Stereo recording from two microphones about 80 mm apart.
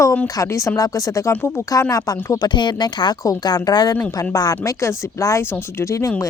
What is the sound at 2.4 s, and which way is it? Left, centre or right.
Speech, left.